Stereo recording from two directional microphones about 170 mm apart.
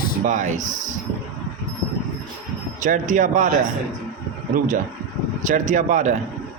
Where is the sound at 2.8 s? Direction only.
50° right (ahead or behind).